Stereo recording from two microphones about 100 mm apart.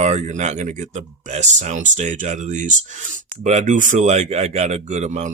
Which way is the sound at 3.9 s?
90° right.